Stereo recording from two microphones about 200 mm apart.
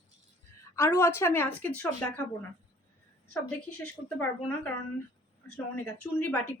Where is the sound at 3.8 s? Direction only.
5° left (ahead or behind).